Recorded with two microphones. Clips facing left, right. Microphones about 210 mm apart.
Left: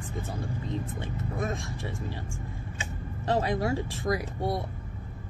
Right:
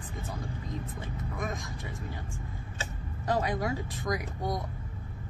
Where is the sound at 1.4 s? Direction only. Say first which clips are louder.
Left 4 dB; 30° left (ahead or behind).